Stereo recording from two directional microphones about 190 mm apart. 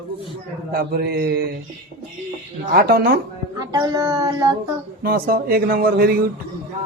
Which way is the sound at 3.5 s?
20° right (ahead or behind).